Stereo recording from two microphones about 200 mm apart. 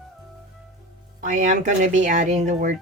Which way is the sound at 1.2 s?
40° right (ahead or behind).